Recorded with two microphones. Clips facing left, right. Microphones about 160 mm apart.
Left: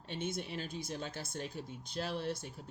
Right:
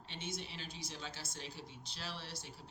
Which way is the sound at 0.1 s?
50° left (ahead or behind).